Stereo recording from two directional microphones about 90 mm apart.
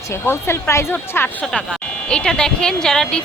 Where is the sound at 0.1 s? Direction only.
30° left (ahead or behind).